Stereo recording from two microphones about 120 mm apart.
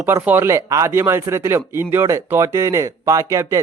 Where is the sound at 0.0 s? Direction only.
15° right (ahead or behind).